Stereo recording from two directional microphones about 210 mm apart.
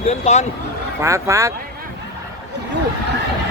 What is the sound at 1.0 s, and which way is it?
Speech, 15° right (ahead or behind).